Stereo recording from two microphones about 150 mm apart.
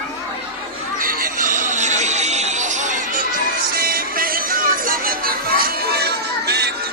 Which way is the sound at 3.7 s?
80° right.